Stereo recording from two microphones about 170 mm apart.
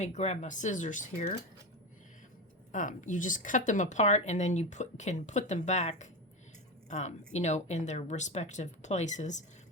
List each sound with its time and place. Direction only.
0.0 s speech: 40° left (ahead or behind)
2.7 s speech: 50° left (ahead or behind)